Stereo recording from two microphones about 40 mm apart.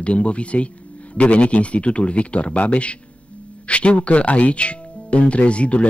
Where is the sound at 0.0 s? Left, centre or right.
Left.